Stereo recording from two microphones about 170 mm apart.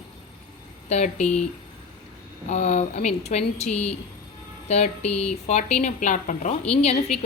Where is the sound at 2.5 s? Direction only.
45° left (ahead or behind).